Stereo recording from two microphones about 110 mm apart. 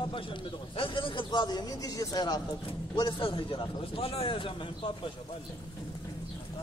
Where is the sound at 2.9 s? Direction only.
50° left (ahead or behind).